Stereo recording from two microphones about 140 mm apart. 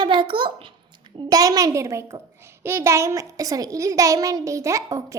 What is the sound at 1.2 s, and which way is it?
A woman's voice, 25° right (ahead or behind).